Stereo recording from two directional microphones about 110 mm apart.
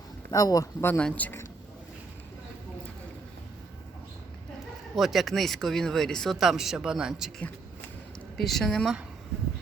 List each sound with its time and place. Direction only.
0.3 s speech: 35° left (ahead or behind)
0.9 s speech: 10° left (ahead or behind)
4.9 s speech: centre (ahead or behind)
8.4 s speech: centre (ahead or behind)